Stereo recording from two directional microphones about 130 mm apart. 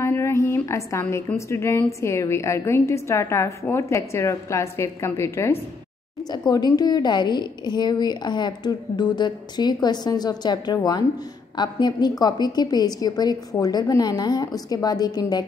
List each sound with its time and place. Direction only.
0.0 s a sound: 20° left (ahead or behind)
1.1 s a woman's voice: 20° left (ahead or behind)
6.3 s a woman's voice: 30° left (ahead or behind)